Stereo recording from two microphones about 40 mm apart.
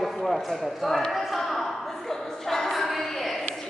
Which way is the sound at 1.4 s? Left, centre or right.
Centre.